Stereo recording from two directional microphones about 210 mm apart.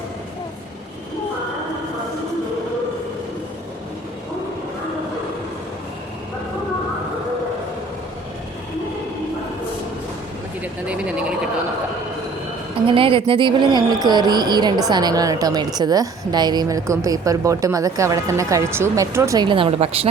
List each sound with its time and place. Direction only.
10.6 s speech: 5° right (ahead or behind)
12.9 s speech: 25° right (ahead or behind)